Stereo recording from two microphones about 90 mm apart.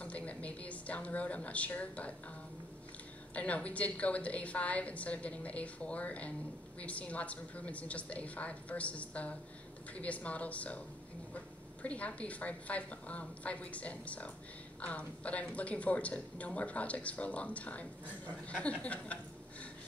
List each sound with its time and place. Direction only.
0.0 s a woman's voice: 15° left (ahead or behind)
3.3 s speech: 15° left (ahead or behind)
11.8 s speech: 15° left (ahead or behind)